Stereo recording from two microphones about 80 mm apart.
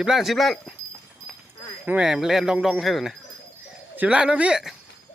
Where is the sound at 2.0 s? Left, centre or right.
Centre.